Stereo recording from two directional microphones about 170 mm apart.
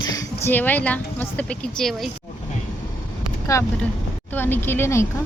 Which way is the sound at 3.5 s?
20° left (ahead or behind).